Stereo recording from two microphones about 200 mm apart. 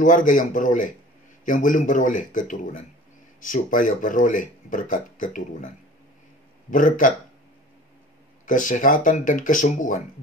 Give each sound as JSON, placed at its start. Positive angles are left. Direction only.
{"t": 0.0, "sound": "speech", "side_deg": 40}
{"t": 6.7, "sound": "speech", "side_deg": 40}
{"t": 8.5, "sound": "speech", "side_deg": 40}